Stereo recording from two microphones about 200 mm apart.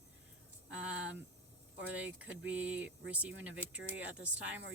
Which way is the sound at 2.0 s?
5° right (ahead or behind).